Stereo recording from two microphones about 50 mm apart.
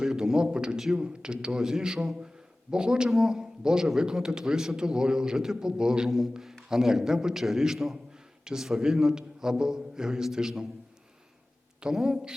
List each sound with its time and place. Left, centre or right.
0.0 s a man's voice: centre
6.1 s a man's voice: centre
11.8 s a man's voice: centre